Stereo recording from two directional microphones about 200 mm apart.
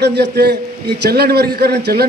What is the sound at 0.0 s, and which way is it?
A man's voice, 55° right (ahead or behind).